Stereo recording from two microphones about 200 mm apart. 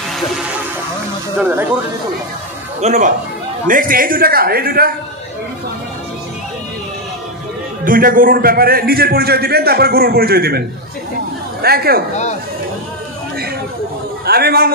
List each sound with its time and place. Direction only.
2.8 s a man's voice: 35° right (ahead or behind)
7.8 s a man's voice: 45° right (ahead or behind)
11.6 s a man's voice: 50° right (ahead or behind)
14.2 s a man's voice: 50° right (ahead or behind)